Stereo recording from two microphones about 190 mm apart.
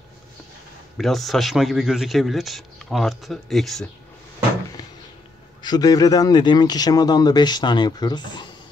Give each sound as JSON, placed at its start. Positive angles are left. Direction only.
{"t": 0.9, "sound": "a man's voice", "side_deg": 0}
{"t": 4.8, "sound": "a sound", "side_deg": 20}
{"t": 5.6, "sound": "speech", "side_deg": 20}